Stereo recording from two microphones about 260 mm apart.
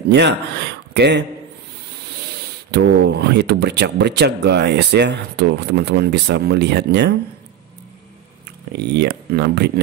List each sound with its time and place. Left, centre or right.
0.1 s speech: right
2.7 s speech: right
8.7 s speech: right